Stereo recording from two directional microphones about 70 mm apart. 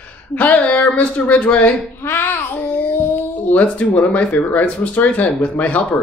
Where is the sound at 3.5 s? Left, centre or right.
Left.